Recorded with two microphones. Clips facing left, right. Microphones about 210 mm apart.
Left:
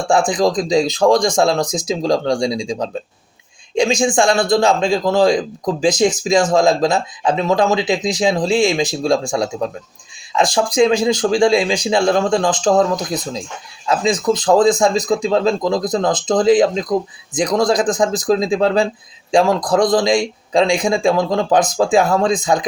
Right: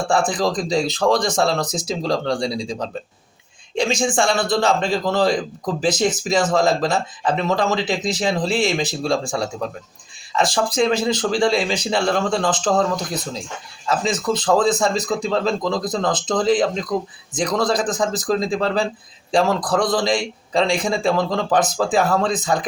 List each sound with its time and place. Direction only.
0.1 s a man's voice: 15° left (ahead or behind)